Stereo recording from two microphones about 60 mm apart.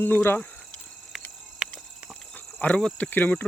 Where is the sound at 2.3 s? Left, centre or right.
Left.